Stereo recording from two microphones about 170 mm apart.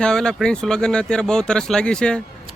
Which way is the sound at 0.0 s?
5° left (ahead or behind).